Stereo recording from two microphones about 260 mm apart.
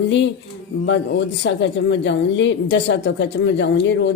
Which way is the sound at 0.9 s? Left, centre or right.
Left.